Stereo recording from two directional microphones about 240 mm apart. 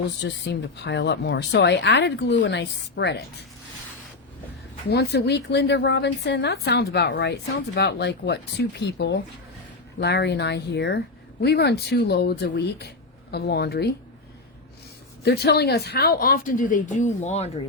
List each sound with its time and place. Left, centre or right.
0.3 s a woman's voice: left
4.9 s a woman's voice: left
15.2 s speech: left